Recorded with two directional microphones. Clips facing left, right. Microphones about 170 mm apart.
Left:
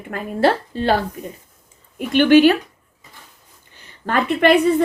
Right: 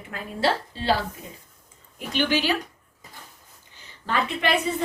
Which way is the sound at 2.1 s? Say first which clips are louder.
Left 12 dB; 55° left (ahead or behind).